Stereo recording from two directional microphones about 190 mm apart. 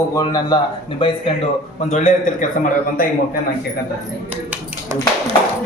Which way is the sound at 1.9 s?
40° left (ahead or behind).